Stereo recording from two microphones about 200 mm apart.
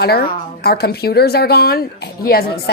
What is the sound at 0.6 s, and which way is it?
A woman's voice, 50° left (ahead or behind).